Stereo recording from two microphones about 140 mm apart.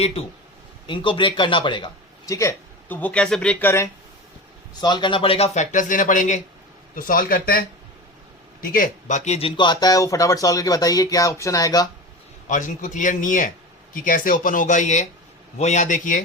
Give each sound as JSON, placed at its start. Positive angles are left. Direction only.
{"t": 0.9, "sound": "a man's voice", "side_deg": 35}
{"t": 2.3, "sound": "speech", "side_deg": 20}
{"t": 3.0, "sound": "speech", "side_deg": 10}
{"t": 4.7, "sound": "speech", "side_deg": 30}
{"t": 6.9, "sound": "a man's voice", "side_deg": 90}
{"t": 8.6, "sound": "speech", "side_deg": 90}
{"t": 12.5, "sound": "a man's voice", "side_deg": 65}